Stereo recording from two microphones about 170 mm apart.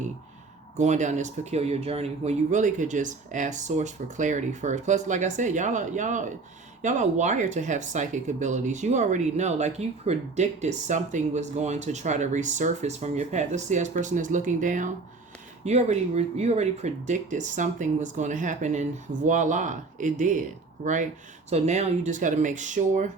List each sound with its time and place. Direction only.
0.8 s speech: 45° right (ahead or behind)